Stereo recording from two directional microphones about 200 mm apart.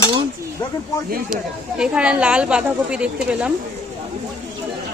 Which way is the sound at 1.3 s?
5° right (ahead or behind).